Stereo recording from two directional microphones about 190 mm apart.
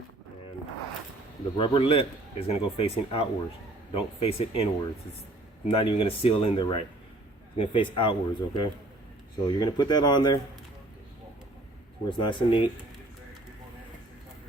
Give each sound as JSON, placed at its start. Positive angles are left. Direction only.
{"t": 1.5, "sound": "speech", "side_deg": 25}
{"t": 12.0, "sound": "speech", "side_deg": 25}